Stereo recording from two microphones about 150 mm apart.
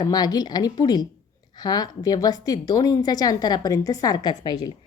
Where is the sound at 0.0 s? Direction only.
25° left (ahead or behind).